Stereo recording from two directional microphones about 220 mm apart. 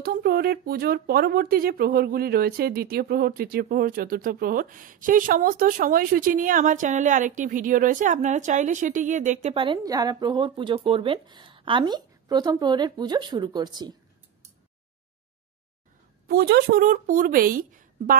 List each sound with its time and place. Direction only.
0.0 s speech: 45° right (ahead or behind); by 13.9 s 20° right (ahead or behind)
16.3 s speech: 45° right (ahead or behind)